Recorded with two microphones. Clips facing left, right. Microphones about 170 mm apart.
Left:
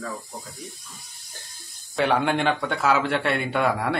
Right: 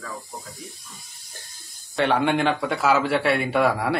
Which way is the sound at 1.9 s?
Centre (ahead or behind).